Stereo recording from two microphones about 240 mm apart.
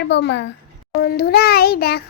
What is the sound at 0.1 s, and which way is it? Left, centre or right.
A child's voice, left.